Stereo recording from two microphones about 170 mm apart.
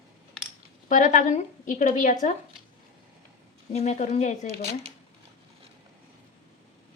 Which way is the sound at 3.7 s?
40° left (ahead or behind).